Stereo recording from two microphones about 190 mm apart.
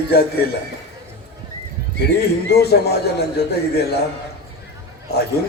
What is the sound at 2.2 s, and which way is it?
Speech, 60° left (ahead or behind).